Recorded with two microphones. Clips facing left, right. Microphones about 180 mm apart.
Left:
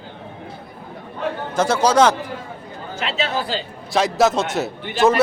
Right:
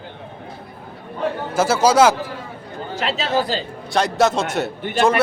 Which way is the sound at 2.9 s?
40° right (ahead or behind).